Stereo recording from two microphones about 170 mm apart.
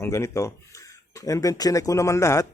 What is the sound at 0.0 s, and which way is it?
A man's voice, 15° left (ahead or behind).